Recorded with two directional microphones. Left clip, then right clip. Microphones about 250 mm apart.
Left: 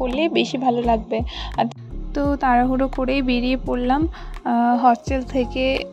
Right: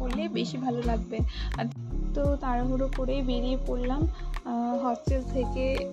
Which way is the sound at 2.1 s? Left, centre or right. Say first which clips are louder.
Left 11 dB; left.